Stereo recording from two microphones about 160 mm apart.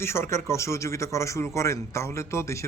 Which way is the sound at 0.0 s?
15° left (ahead or behind).